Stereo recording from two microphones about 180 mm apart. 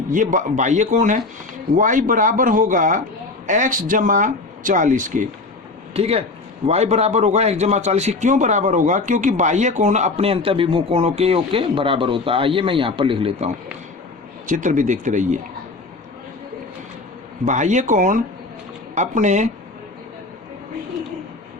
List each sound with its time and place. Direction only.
0.1 s speech: 45° right (ahead or behind)
5.9 s a man's voice: 35° right (ahead or behind)
14.4 s speech: 45° right (ahead or behind)
17.4 s a man's voice: 45° right (ahead or behind)